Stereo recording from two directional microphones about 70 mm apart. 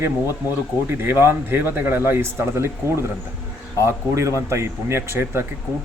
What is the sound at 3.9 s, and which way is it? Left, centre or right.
A man's voice, right.